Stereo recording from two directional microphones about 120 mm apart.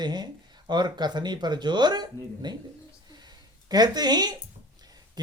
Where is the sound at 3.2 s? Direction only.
35° right (ahead or behind).